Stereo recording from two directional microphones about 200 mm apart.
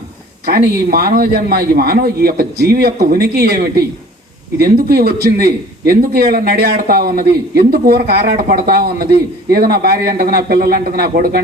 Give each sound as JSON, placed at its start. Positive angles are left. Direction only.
{"t": 0.4, "sound": "a man's voice", "side_deg": -50}
{"t": 4.9, "sound": "a man's voice", "side_deg": -50}